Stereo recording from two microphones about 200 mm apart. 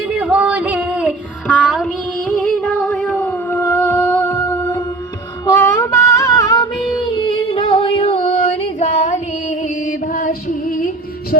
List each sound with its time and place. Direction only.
0.0 s music: 5° right (ahead or behind)
2.9 s a sound: 5° left (ahead or behind)
7.2 s music: 25° left (ahead or behind); by 11.3 s 45° left (ahead or behind)